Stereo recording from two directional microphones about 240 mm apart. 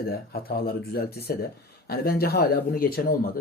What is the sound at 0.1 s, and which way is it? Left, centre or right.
Speech, left.